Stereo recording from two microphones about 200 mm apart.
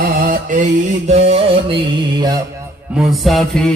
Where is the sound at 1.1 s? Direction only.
30° right (ahead or behind).